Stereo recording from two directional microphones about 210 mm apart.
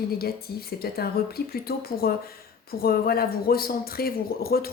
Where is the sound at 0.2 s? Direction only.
45° left (ahead or behind).